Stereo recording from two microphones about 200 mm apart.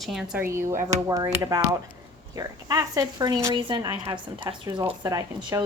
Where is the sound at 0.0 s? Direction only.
Centre (ahead or behind).